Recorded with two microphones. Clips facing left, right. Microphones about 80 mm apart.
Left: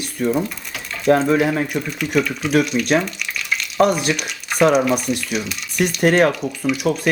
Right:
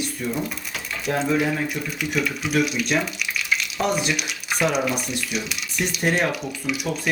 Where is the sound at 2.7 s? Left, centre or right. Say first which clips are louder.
Left 5 dB; left.